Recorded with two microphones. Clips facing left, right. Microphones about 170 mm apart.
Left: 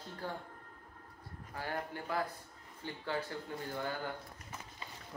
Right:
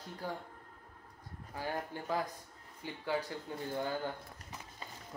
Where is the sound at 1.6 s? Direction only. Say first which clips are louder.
Right 1 dB; 15° right (ahead or behind).